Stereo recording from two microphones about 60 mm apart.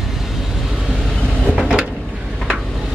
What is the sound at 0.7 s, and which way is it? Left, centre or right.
Vehicle, centre.